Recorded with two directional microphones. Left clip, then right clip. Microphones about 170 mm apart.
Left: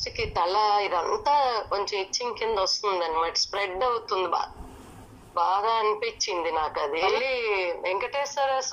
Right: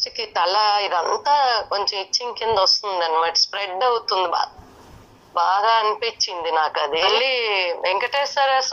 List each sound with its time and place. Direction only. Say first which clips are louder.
0.0 s a sound: right 4 dB; 35° right (ahead or behind)
0.5 s a man's voice: right 5 dB; 35° right (ahead or behind)
7.8 s a woman's voice: right 7 dB; 5° right (ahead or behind)